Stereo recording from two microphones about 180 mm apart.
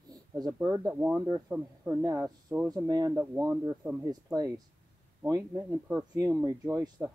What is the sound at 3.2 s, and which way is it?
Speech, 10° right (ahead or behind).